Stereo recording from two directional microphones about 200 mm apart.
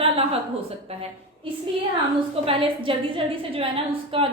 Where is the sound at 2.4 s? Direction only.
25° right (ahead or behind).